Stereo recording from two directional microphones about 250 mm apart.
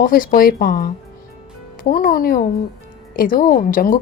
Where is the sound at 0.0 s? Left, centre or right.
Left.